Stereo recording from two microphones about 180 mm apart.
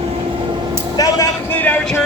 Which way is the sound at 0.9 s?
20° left (ahead or behind).